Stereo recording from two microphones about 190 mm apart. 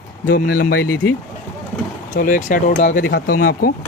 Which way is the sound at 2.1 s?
45° left (ahead or behind).